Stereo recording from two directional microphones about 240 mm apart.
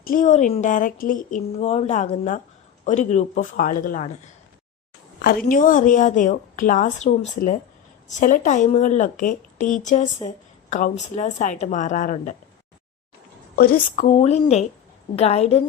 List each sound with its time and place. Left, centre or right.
0.0 s speech: left
5.2 s speech: left
13.6 s a woman's voice: left